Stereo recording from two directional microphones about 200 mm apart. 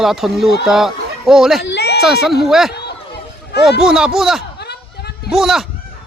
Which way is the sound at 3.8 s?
5° right (ahead or behind).